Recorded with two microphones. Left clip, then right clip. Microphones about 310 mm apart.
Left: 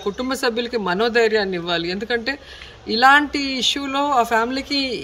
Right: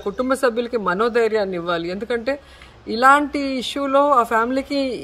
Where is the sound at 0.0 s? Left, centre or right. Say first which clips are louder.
Right 3 dB; centre.